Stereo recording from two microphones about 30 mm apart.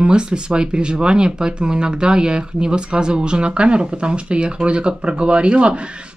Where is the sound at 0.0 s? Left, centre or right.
Right.